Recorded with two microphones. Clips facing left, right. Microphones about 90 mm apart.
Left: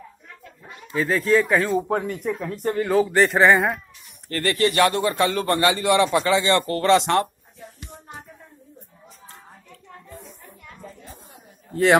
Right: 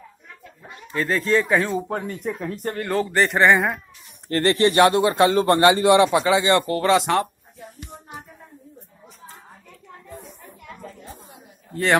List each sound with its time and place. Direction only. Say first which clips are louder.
0.9 s speech: left 1 dB; centre (ahead or behind)
4.3 s a man's voice: right 3 dB; 25° right (ahead or behind)
6.9 s speech: left 2 dB; 5° right (ahead or behind)
11.7 s a man's voice: left 3 dB; centre (ahead or behind)